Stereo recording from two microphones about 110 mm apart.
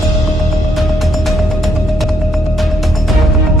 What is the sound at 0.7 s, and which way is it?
Music, centre (ahead or behind).